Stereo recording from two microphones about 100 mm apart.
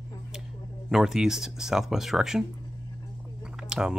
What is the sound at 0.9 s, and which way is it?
Speech, 5° right (ahead or behind).